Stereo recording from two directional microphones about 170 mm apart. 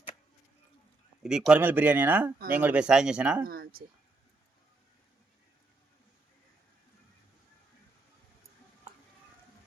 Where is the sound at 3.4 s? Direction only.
60° right (ahead or behind).